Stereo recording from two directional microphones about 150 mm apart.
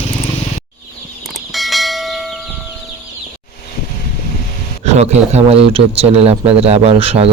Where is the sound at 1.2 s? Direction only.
Centre (ahead or behind).